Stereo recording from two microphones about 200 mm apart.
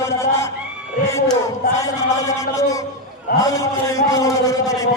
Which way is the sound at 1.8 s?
15° left (ahead or behind).